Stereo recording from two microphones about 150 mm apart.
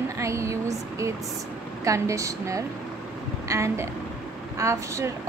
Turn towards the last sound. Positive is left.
turn(degrees=-20)  # may be behind; listen again after turning